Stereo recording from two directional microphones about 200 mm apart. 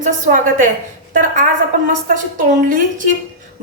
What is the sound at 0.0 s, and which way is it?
Speech, 40° right (ahead or behind).